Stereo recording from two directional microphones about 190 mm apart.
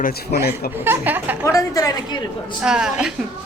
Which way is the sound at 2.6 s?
5° right (ahead or behind).